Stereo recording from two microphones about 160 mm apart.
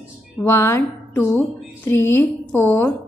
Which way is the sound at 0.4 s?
15° left (ahead or behind).